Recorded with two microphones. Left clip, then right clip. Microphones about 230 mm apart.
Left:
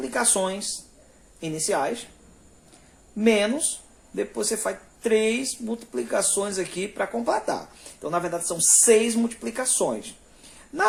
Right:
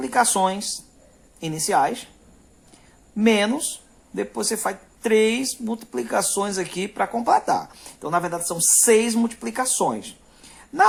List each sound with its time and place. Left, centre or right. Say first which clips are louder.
0.0 s speech: right 5 dB; right
3.2 s speech: right 1 dB; right